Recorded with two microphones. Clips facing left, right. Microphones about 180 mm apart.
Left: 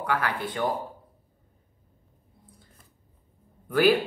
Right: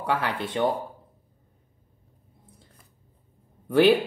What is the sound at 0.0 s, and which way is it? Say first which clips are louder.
Speech: right 1 dB; 25° right (ahead or behind).